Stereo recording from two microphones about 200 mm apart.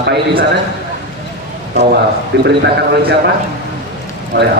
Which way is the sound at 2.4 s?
55° right (ahead or behind).